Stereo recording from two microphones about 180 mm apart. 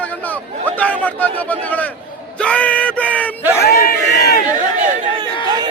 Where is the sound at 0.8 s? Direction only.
10° left (ahead or behind).